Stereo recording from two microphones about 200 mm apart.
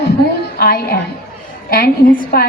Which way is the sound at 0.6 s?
45° left (ahead or behind).